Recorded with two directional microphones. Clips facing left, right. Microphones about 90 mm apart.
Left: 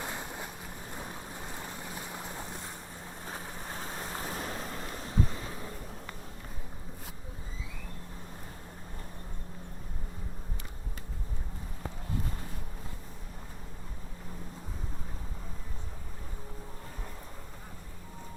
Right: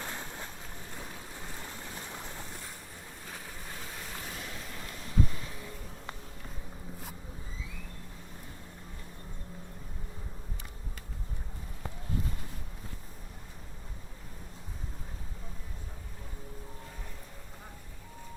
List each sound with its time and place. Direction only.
0.0 s boat: 15° left (ahead or behind)
3.2 s waves: 35° left (ahead or behind)